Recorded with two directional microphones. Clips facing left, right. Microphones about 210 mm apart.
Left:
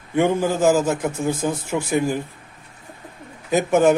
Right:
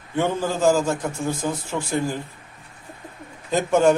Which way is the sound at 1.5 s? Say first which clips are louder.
Left 3 dB; 15° left (ahead or behind).